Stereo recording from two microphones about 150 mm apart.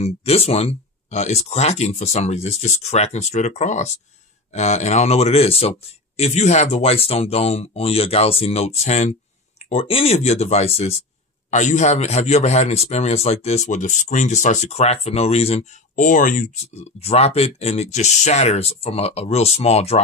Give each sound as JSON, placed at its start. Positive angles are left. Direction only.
{"t": 0.0, "sound": "speech", "side_deg": 45}
{"t": 16.0, "sound": "speech", "side_deg": 60}